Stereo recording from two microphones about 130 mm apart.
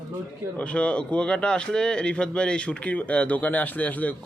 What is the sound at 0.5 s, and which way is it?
Speech, 10° left (ahead or behind).